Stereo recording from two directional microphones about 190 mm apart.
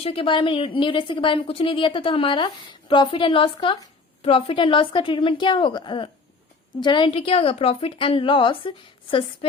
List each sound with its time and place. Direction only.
0.0 s a woman's voice: 30° left (ahead or behind)